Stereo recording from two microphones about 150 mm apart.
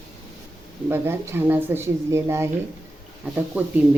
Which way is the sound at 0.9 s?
15° right (ahead or behind).